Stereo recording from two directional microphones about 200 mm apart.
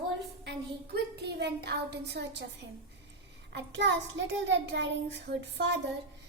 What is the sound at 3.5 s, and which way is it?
Speech, 65° right (ahead or behind).